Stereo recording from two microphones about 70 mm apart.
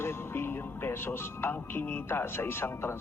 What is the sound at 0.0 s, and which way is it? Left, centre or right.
Speech, left.